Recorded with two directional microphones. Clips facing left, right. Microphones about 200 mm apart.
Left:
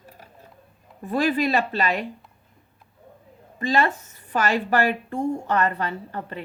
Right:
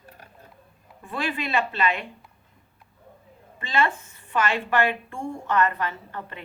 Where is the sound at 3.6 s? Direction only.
40° left (ahead or behind).